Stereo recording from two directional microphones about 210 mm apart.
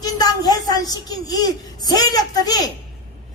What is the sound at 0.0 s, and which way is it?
A child's voice, 20° left (ahead or behind).